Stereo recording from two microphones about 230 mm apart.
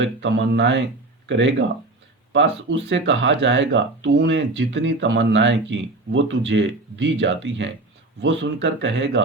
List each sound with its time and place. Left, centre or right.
0.0 s speech: right